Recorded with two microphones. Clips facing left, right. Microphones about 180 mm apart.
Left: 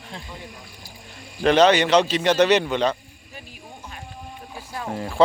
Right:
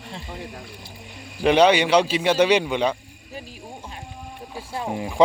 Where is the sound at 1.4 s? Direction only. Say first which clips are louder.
Even; 10° right (ahead or behind).